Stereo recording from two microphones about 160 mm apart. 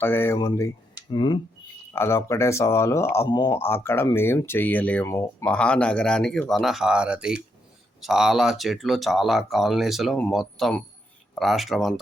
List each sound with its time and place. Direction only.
0.0 s speech: 15° left (ahead or behind)
1.1 s speech: 30° left (ahead or behind)
1.9 s speech: 15° left (ahead or behind)
3.6 s speech: 15° left (ahead or behind)
5.5 s speech: 5° left (ahead or behind)